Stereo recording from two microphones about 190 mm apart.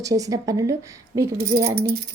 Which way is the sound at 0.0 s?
20° right (ahead or behind).